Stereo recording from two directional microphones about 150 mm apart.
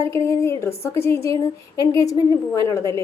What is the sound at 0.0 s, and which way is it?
A woman's voice, 20° left (ahead or behind).